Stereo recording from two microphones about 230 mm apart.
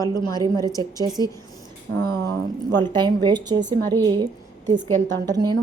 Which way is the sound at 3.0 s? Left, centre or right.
Centre.